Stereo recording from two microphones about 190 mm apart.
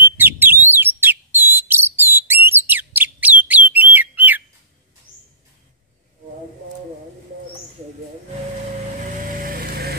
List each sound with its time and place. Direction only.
0.2 s bird: 10° right (ahead or behind)
9.2 s vehicle: 45° right (ahead or behind)